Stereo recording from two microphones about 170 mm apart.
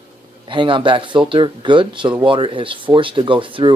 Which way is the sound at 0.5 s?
30° right (ahead or behind).